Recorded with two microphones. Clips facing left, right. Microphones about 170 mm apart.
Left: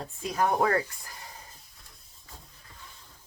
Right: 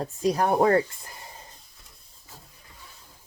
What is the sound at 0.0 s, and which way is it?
Speech, 40° right (ahead or behind).